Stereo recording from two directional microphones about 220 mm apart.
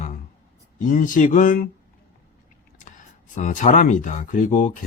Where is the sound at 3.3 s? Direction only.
35° left (ahead or behind).